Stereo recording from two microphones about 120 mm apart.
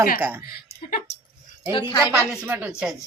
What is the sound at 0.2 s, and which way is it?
Speech, 15° right (ahead or behind).